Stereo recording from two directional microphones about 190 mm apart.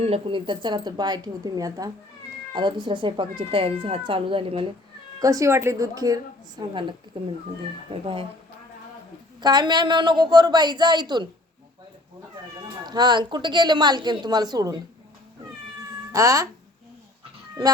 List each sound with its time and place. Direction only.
0.0 s speech: 30° right (ahead or behind)
5.2 s a woman's voice: 15° right (ahead or behind)
9.4 s speech: 20° right (ahead or behind)
12.6 s speech: 20° right (ahead or behind)
16.1 s a woman's voice: 15° right (ahead or behind)